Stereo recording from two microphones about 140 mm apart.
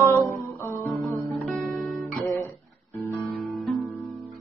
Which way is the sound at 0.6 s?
20° left (ahead or behind).